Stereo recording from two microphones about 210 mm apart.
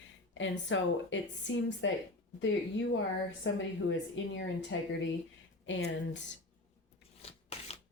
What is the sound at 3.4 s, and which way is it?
Speech, 65° left (ahead or behind).